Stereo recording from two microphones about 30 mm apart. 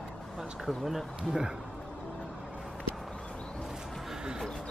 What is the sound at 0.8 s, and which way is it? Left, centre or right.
Speech, centre.